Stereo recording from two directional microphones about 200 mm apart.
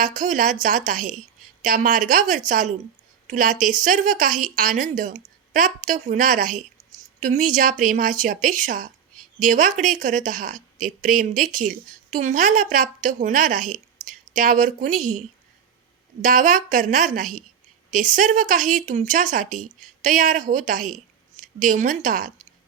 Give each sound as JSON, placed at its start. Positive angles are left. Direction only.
{"t": 0.0, "sound": "speech", "side_deg": -40}
{"t": 16.2, "sound": "speech", "side_deg": -40}